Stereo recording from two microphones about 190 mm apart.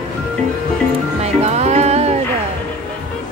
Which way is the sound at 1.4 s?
35° right (ahead or behind).